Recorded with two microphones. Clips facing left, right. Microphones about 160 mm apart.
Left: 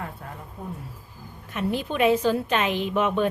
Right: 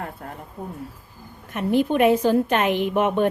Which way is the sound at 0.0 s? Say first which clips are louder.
Right 3 dB; 45° right (ahead or behind).